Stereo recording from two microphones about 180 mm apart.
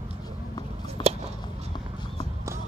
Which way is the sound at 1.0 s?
35° right (ahead or behind).